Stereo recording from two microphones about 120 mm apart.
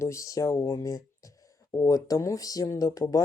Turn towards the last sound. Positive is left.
turn(degrees=30)  # may be behind; listen again after turning